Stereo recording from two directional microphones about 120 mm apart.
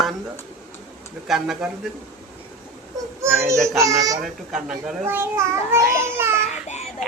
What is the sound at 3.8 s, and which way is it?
Speech, 30° right (ahead or behind).